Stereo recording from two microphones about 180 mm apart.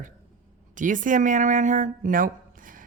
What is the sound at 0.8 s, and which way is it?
A woman's voice, 45° right (ahead or behind).